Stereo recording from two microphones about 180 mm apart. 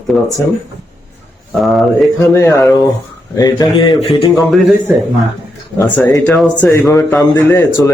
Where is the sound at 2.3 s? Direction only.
15° left (ahead or behind).